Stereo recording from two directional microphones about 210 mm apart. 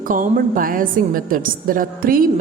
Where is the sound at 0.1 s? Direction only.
40° right (ahead or behind).